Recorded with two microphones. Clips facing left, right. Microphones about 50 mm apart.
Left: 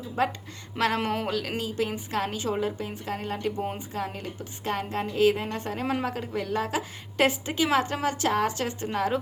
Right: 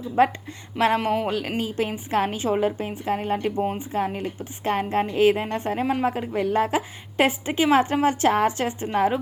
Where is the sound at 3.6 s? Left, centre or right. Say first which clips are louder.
Right 6 dB; centre.